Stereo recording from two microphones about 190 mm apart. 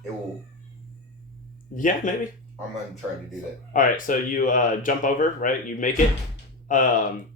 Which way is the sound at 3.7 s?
45° left (ahead or behind).